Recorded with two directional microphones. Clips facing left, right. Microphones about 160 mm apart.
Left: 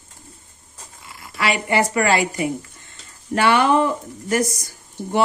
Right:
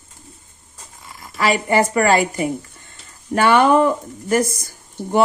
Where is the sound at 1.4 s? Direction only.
40° right (ahead or behind).